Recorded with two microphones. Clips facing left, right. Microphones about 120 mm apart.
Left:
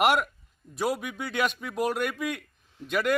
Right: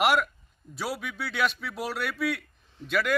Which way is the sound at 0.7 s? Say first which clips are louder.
Left 5 dB; 50° left (ahead or behind).